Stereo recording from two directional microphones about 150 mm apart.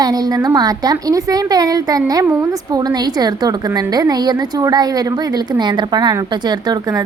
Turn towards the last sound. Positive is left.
turn(degrees=-25)  # may be behind; listen again after turning